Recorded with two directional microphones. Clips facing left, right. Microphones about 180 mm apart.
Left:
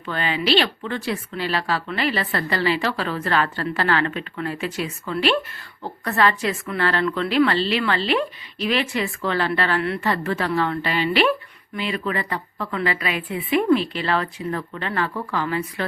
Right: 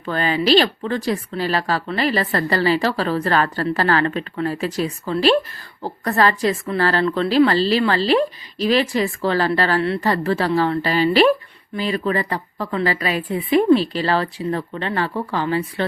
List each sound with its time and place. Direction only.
0.0 s a woman's voice: 40° right (ahead or behind)